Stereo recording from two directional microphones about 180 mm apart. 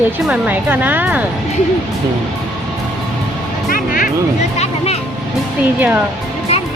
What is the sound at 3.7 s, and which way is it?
Music, 50° left (ahead or behind).